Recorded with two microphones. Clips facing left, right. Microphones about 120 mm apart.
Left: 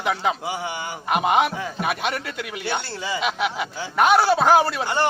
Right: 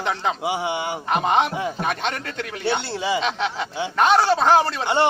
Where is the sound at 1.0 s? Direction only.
10° left (ahead or behind).